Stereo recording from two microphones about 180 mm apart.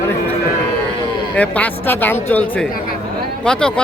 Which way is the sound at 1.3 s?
10° left (ahead or behind).